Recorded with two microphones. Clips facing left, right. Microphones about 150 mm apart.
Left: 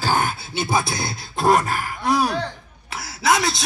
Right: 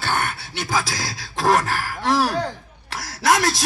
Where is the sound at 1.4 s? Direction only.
10° left (ahead or behind).